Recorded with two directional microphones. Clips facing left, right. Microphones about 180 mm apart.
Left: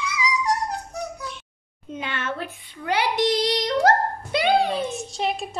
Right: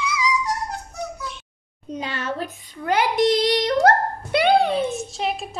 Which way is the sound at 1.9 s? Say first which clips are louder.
Right 2 dB; 35° right (ahead or behind).